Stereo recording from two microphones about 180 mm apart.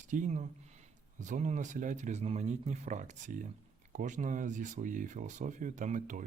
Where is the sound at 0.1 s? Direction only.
45° right (ahead or behind).